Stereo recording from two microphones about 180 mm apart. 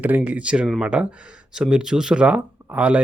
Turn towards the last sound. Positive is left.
turn(degrees=-5)  # may be behind; listen again after turning